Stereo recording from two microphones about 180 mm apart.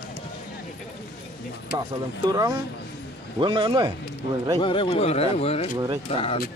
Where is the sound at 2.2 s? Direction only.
20° right (ahead or behind).